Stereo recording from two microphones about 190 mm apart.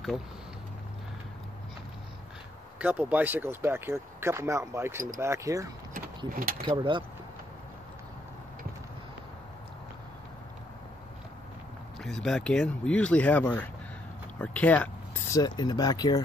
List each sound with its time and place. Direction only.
2.8 s speech: 10° right (ahead or behind)
5.9 s speech: 45° right (ahead or behind)
6.6 s speech: 25° right (ahead or behind)
12.0 s speech: 5° left (ahead or behind)
15.3 s speech: 20° left (ahead or behind)